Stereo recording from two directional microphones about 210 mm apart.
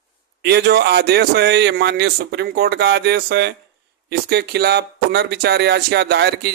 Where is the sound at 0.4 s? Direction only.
50° right (ahead or behind).